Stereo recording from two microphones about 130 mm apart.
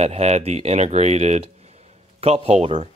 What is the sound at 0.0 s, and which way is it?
Speech, 55° right (ahead or behind).